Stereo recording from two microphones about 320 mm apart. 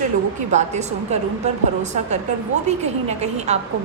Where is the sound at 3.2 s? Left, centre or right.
Right.